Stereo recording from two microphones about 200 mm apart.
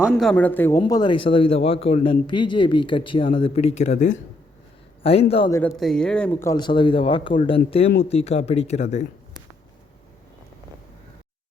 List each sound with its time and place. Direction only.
0.0 s a man's voice: centre (ahead or behind)
0.8 s a man's voice: 20° left (ahead or behind)
5.5 s a man's voice: 15° left (ahead or behind)
5.7 s speech: centre (ahead or behind)
6.5 s a man's voice: 20° left (ahead or behind)